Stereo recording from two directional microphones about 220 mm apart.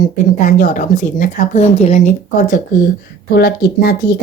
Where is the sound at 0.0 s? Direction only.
35° left (ahead or behind).